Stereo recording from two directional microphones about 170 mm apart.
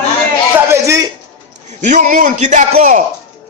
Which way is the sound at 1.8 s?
45° right (ahead or behind).